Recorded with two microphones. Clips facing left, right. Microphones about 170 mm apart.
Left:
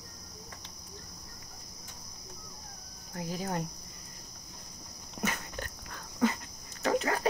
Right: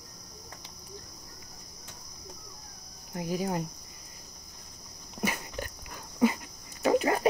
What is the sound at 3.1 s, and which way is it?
Speech, 15° right (ahead or behind).